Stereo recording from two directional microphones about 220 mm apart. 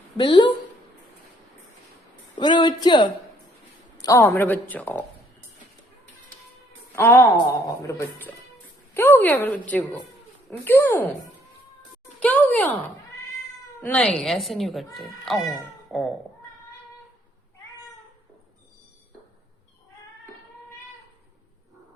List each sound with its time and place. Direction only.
0.2 s a woman's voice: 20° left (ahead or behind)
2.4 s a woman's voice: 20° left (ahead or behind)
6.9 s a woman's voice: 15° left (ahead or behind)
12.2 s a sound: 5° left (ahead or behind)
13.8 s a woman's voice: 5° left (ahead or behind)